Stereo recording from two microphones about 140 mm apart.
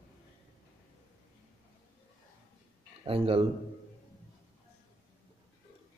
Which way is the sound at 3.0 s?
40° right (ahead or behind).